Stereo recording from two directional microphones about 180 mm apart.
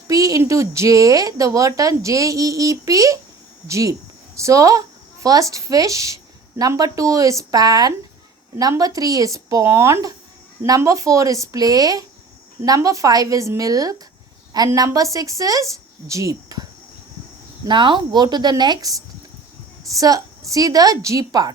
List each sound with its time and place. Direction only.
0.1 s a woman's voice: 20° right (ahead or behind)
17.7 s speech: 25° right (ahead or behind)